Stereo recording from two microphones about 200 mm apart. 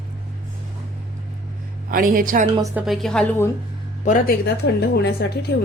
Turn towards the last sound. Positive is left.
turn(degrees=55)  # may be behind; listen again after turning